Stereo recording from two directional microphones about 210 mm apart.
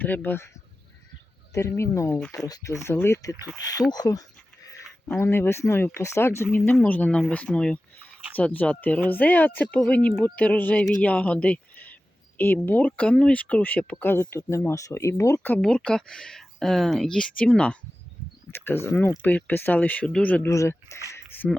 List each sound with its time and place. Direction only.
0.0 s speech: 10° left (ahead or behind)
1.5 s speech: 15° left (ahead or behind)
21.1 s a sound: 10° left (ahead or behind)